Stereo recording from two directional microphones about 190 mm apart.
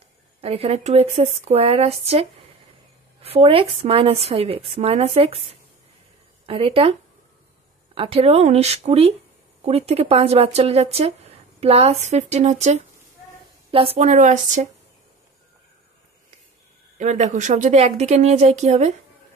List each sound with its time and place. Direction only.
0.4 s speech: 30° right (ahead or behind)
6.4 s speech: 30° right (ahead or behind)
17.0 s speech: 40° right (ahead or behind)